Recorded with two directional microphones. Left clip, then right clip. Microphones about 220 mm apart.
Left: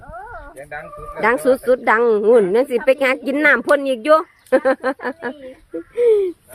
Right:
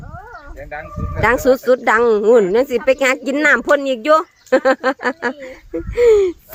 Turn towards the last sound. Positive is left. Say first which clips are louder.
# right 3 dB
turn(degrees=-15)  # may be behind; listen again after turning